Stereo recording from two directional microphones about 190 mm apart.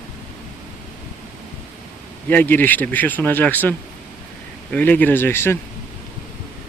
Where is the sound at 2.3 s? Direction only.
10° left (ahead or behind).